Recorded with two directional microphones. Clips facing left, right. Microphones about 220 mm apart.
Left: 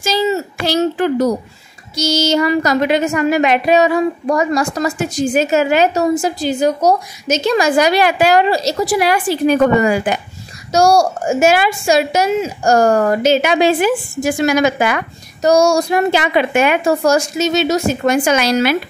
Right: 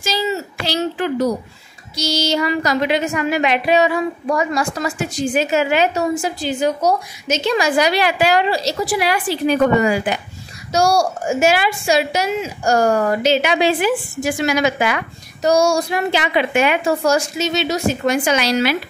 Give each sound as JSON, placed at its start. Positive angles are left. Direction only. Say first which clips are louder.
{"t": 0.0, "sound": "a woman's voice", "louder": "left 5 dB", "side_deg": 50}